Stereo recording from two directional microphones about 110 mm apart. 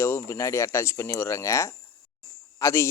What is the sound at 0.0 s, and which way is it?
Speech, 25° left (ahead or behind).